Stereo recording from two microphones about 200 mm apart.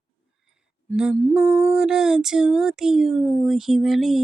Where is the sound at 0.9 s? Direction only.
5° right (ahead or behind).